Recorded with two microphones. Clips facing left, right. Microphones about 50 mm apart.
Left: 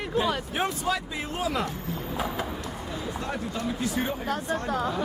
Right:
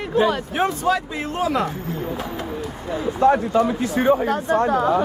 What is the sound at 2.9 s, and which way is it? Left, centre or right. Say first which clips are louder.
Speech: right 17 dB; right.